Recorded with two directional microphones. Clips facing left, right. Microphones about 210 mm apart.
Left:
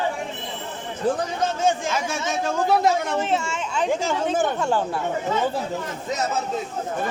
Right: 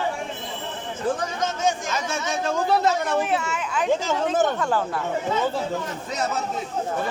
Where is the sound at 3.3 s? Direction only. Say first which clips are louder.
Left 1 dB; 25° left (ahead or behind).